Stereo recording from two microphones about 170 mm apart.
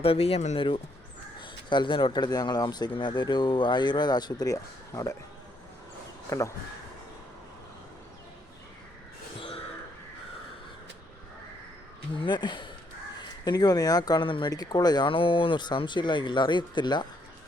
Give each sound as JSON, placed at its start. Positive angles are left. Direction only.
{"t": 0.0, "sound": "speech", "side_deg": 35}
{"t": 9.4, "sound": "crow", "side_deg": 35}
{"t": 12.2, "sound": "speech", "side_deg": 25}